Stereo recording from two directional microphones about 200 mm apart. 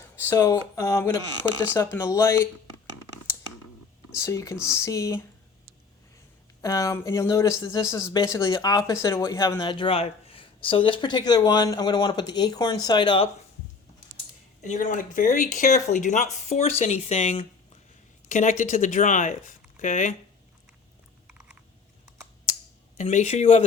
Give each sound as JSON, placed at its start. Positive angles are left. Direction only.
{"t": 0.0, "sound": "speech", "side_deg": 15}
{"t": 4.1, "sound": "speech", "side_deg": 15}
{"t": 6.6, "sound": "speech", "side_deg": 15}
{"t": 14.6, "sound": "speech", "side_deg": 40}
{"t": 21.2, "sound": "typing", "side_deg": -5}
{"t": 23.0, "sound": "speech", "side_deg": 35}